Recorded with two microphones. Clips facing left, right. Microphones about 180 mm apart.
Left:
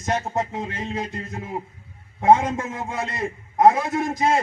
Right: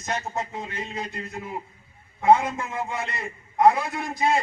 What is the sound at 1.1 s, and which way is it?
A man's voice, 45° left (ahead or behind).